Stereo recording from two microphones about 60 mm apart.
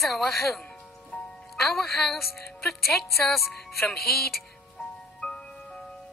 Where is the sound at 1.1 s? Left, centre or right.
Left.